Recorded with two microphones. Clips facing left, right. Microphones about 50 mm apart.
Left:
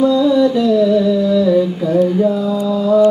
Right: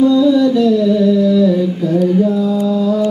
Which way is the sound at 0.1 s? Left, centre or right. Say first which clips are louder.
Right 1 dB; centre.